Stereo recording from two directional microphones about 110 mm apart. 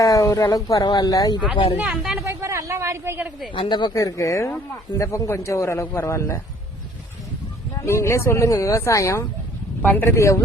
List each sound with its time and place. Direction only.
0.0 s speech: 30° left (ahead or behind)
1.8 s speech: 5° right (ahead or behind)
2.2 s a sound: 25° right (ahead or behind)
3.5 s a man's voice: 45° left (ahead or behind); by 6.4 s 25° left (ahead or behind)
7.8 s a man's voice: 25° left (ahead or behind)
9.8 s a man's voice: 15° left (ahead or behind)